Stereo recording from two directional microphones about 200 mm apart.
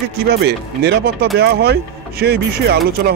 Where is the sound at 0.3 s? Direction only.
55° right (ahead or behind).